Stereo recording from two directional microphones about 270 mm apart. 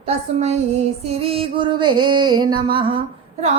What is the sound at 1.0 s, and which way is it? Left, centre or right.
Music, right.